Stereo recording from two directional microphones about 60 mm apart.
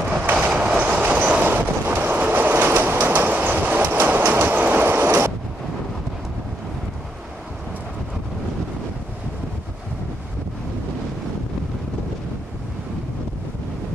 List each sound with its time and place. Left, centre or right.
0.0 s train: right